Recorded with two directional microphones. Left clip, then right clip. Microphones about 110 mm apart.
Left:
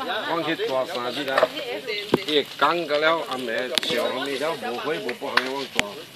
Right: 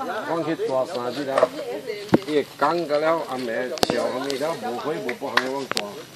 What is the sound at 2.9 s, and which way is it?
Speech, 45° right (ahead or behind).